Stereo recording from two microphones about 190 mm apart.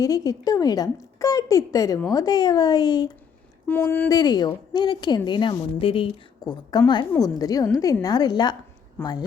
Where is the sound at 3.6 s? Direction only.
10° left (ahead or behind).